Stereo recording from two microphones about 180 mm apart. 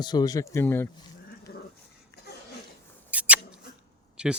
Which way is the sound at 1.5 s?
60° left (ahead or behind).